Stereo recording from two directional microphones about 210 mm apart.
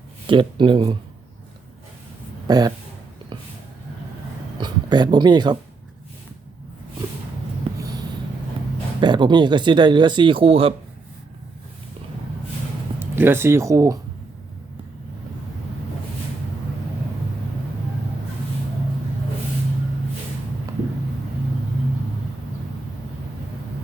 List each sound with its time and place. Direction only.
0.3 s speech: 25° right (ahead or behind)
2.5 s speech: 20° right (ahead or behind)
4.6 s speech: 20° right (ahead or behind)
7.7 s a sound: 25° right (ahead or behind)
9.0 s speech: 20° right (ahead or behind)
13.0 s speech: 10° right (ahead or behind)